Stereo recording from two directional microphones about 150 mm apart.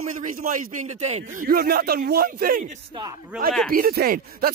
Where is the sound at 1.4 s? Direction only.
80° right.